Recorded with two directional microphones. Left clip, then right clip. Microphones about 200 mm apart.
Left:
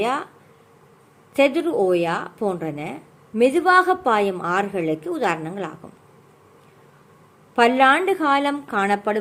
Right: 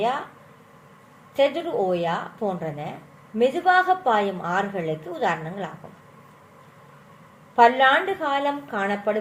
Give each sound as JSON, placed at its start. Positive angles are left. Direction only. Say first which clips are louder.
{"t": 1.4, "sound": "a woman's voice", "louder": "left 3 dB", "side_deg": 60}
{"t": 7.5, "sound": "a woman's voice", "louder": "left 1 dB", "side_deg": 55}